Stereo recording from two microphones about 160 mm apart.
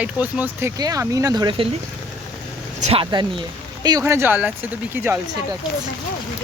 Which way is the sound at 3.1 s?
30° right (ahead or behind).